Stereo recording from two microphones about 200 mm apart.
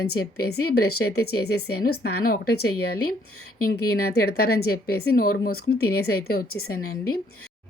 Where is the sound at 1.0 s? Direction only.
65° left (ahead or behind).